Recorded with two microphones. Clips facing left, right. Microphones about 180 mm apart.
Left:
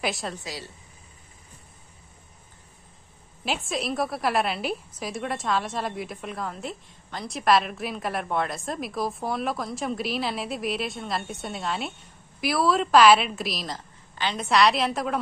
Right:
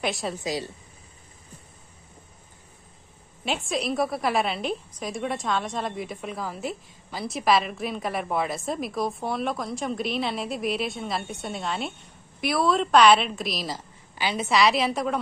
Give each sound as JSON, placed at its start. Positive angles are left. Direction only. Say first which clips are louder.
{"t": 0.0, "sound": "a woman's voice", "louder": "right 1 dB", "side_deg": 0}
{"t": 0.4, "sound": "a woman's voice", "louder": "right 8 dB", "side_deg": -20}
{"t": 3.4, "sound": "a woman's voice", "louder": "right 1 dB", "side_deg": 0}